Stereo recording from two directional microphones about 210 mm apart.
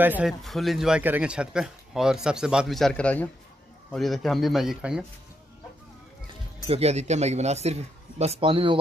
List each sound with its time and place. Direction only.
0.0 s speech: 5° right (ahead or behind)
6.7 s speech: 30° right (ahead or behind)